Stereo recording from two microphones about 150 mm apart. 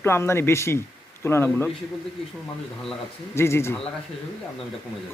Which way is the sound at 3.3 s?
15° left (ahead or behind).